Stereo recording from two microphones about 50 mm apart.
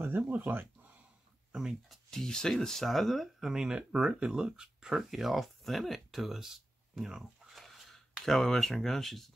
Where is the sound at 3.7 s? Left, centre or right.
Centre.